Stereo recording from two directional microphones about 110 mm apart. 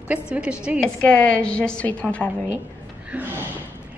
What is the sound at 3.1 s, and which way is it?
Speech, 15° right (ahead or behind).